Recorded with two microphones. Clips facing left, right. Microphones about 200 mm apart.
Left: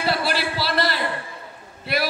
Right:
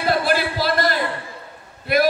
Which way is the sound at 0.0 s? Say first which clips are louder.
Right 4 dB; 50° right (ahead or behind).